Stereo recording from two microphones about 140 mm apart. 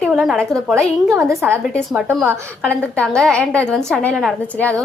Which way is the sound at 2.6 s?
5° left (ahead or behind).